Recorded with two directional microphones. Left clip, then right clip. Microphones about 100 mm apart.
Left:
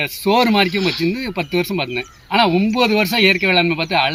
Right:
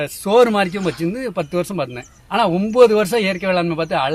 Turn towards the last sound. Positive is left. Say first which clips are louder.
# left 2 dB
turn(degrees=-50)  # may be behind; listen again after turning